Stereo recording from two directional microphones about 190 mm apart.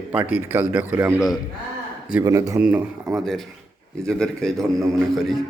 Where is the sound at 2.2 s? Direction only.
15° right (ahead or behind).